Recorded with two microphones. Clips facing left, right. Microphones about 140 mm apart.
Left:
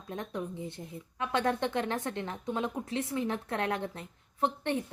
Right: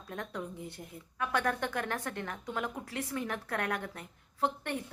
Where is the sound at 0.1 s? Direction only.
20° left (ahead or behind).